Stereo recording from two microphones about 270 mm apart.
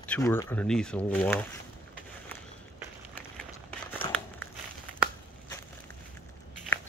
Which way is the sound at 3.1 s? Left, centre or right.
Centre.